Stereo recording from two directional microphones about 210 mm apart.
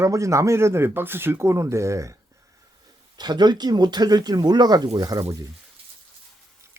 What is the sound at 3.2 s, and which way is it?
Speech, 20° right (ahead or behind).